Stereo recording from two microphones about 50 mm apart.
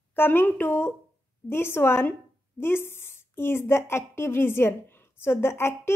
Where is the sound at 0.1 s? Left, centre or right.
Left.